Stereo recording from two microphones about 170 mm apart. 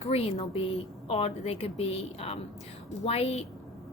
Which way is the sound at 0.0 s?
35° left (ahead or behind).